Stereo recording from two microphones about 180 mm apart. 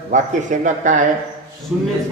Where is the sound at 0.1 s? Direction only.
45° right (ahead or behind).